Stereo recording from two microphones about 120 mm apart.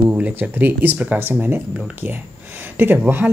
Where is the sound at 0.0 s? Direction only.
10° right (ahead or behind).